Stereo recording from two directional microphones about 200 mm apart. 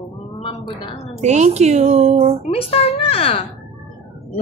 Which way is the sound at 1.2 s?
35° right (ahead or behind).